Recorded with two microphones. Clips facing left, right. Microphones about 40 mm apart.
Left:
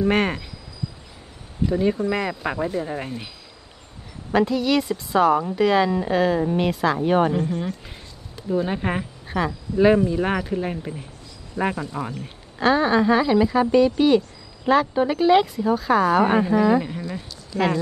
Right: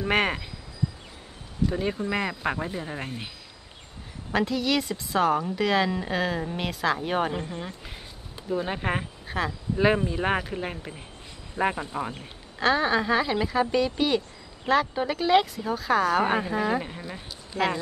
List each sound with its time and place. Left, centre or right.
0.0 s speech: centre
1.7 s speech: centre
4.3 s speech: centre
7.3 s speech: centre
8.5 s speech: centre
9.9 s speech: centre
10.2 s speech: centre
11.6 s a man's voice: right
11.9 s speech: centre
12.5 s speech: centre
17.5 s speech: right